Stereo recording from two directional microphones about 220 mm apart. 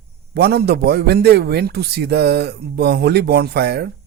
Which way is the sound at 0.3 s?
45° right (ahead or behind).